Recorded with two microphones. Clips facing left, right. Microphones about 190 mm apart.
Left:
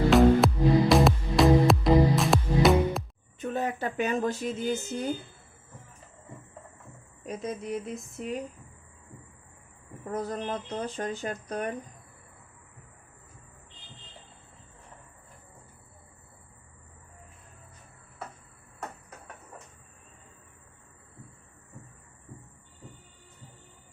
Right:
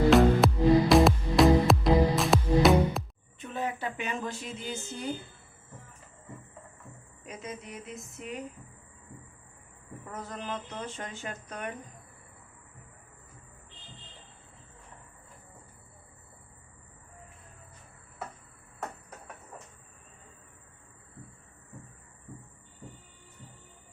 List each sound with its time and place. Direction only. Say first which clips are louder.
0.1 s music: left 3 dB; centre (ahead or behind)
3.4 s a sound: left 4 dB; 45° left (ahead or behind)
7.3 s speech: left 8 dB; 35° left (ahead or behind)
10.1 s speech: left 6 dB; 35° left (ahead or behind)